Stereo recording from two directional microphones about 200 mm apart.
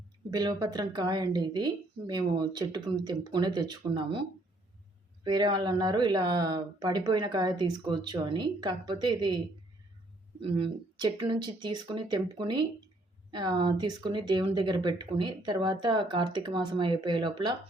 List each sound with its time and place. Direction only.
0.3 s speech: 20° right (ahead or behind)
10.4 s speech: 25° right (ahead or behind)